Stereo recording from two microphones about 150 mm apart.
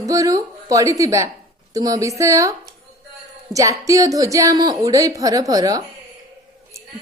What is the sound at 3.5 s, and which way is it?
Speech, 20° right (ahead or behind).